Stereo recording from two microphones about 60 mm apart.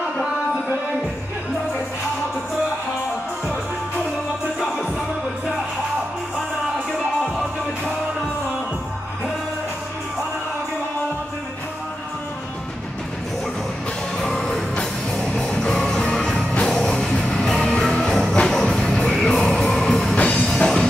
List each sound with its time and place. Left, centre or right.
7.2 s music: centre
14.1 s music: centre